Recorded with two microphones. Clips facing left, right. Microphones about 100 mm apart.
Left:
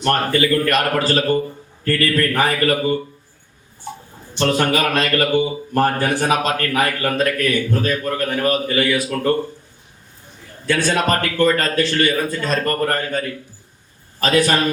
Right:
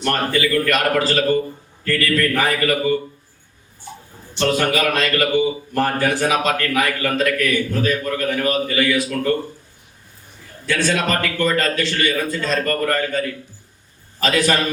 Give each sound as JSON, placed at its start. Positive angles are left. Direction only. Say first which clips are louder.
{"t": 0.1, "sound": "a man's voice", "louder": "left 2 dB", "side_deg": 45}
{"t": 4.4, "sound": "a man's voice", "louder": "left 1 dB", "side_deg": 40}
{"t": 10.9, "sound": "a man's voice", "louder": "left 2 dB", "side_deg": 40}
{"t": 12.5, "sound": "a man's voice", "louder": "even", "side_deg": 35}
{"t": 14.2, "sound": "a man's voice", "louder": "left 2 dB", "side_deg": 40}